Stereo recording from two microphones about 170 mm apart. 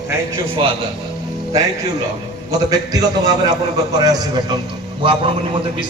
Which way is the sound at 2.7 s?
20° right (ahead or behind).